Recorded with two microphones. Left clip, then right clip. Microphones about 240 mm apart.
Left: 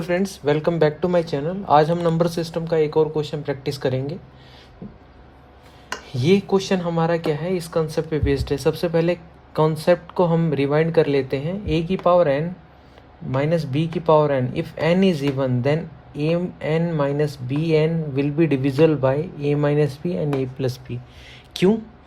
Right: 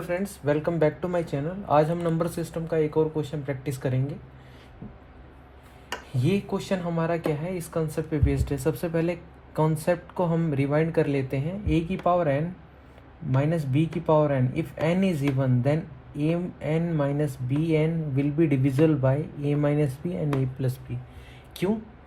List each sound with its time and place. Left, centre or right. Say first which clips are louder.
0.0 s speech: left 6 dB; left
6.1 s speech: left 10 dB; left